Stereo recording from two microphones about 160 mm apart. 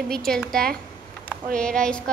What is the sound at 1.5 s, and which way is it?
Speech, 5° left (ahead or behind).